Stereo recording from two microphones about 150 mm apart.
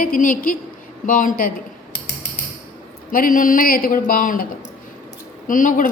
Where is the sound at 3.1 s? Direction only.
65° left (ahead or behind).